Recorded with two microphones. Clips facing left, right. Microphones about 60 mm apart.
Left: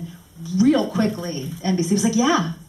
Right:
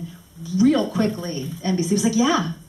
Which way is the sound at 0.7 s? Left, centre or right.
Centre.